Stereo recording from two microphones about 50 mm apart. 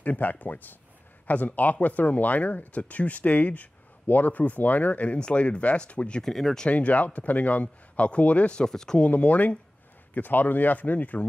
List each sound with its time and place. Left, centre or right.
0.0 s speech: left
6.2 s speech: centre
6.7 s speech: left
8.6 s speech: centre
9.0 s speech: left